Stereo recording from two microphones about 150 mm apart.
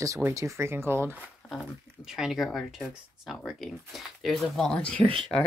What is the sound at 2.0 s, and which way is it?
Speech, 5° right (ahead or behind).